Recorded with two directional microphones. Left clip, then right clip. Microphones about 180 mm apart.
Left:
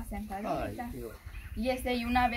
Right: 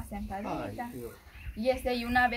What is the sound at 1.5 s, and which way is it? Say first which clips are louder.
Speech: right 3 dB; 10° right (ahead or behind).